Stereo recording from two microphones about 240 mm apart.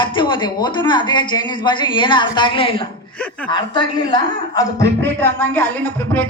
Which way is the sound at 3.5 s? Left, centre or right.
Centre.